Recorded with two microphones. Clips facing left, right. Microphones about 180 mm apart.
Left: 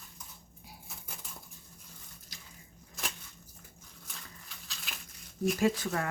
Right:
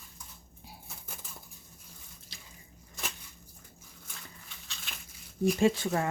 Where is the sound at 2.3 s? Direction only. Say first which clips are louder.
Right 1 dB; 25° right (ahead or behind).